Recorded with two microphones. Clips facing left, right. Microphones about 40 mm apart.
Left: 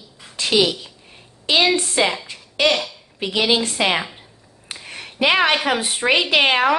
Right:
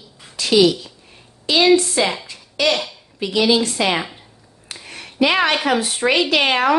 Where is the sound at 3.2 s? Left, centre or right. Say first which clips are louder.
Right 2 dB; left.